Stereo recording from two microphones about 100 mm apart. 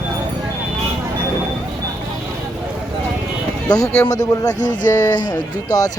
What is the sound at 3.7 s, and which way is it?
Speech, 35° left (ahead or behind).